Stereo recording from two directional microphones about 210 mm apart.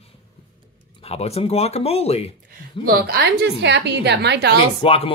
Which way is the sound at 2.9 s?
45° right (ahead or behind).